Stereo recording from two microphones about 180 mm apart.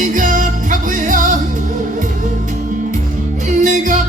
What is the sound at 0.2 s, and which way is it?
Music, 45° right (ahead or behind).